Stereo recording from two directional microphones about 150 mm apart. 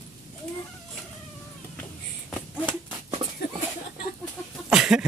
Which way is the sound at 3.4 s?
90° left.